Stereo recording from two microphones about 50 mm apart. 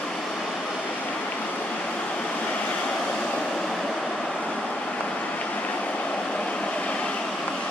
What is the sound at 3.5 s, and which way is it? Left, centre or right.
Waves, centre.